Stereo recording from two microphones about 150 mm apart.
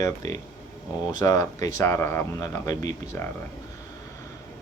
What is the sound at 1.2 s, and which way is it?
Speech, 25° left (ahead or behind).